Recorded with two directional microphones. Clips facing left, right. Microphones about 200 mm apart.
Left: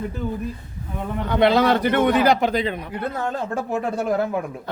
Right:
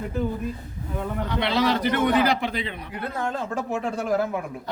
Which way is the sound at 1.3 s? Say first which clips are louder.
Left 7 dB; 50° left (ahead or behind).